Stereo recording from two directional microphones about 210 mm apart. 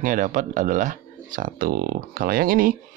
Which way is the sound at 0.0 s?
40° right (ahead or behind).